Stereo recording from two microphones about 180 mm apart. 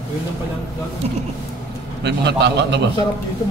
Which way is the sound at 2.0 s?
70° right (ahead or behind).